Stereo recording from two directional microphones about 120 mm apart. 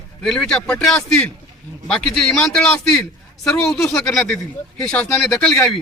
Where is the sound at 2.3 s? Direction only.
5° left (ahead or behind).